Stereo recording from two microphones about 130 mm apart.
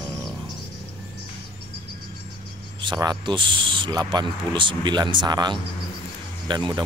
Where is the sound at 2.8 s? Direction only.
35° right (ahead or behind).